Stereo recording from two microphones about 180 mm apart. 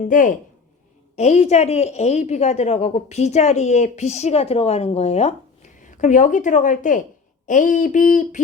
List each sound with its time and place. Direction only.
0.0 s a woman's voice: 45° left (ahead or behind)